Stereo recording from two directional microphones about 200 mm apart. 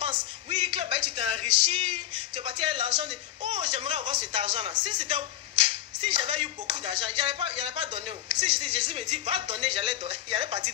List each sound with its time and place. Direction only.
0.0 s speech: 25° right (ahead or behind)